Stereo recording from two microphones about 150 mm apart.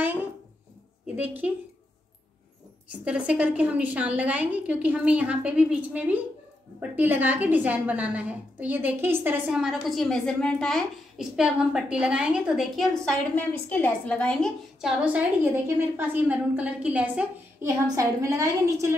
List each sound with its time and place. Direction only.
0.0 s a sound: 10° right (ahead or behind)
1.0 s a woman's voice: 10° right (ahead or behind)
2.9 s a woman's voice: 10° right (ahead or behind)
17.8 s a woman's voice: 20° right (ahead or behind)